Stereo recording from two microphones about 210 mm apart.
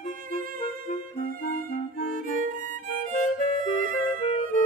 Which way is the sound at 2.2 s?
40° right (ahead or behind).